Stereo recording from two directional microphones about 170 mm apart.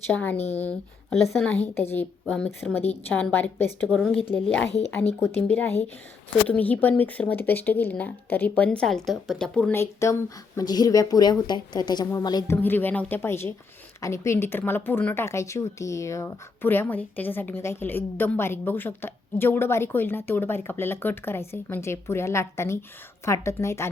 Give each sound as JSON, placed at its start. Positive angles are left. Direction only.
{"t": 0.1, "sound": "a woman's voice", "side_deg": 10}
{"t": 0.3, "sound": "speech", "side_deg": 40}
{"t": 0.6, "sound": "a woman's voice", "side_deg": 5}
{"t": 3.8, "sound": "a woman's voice", "side_deg": 0}
{"t": 12.6, "sound": "a woman's voice", "side_deg": 10}